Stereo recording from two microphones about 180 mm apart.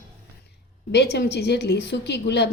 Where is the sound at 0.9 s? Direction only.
65° left (ahead or behind).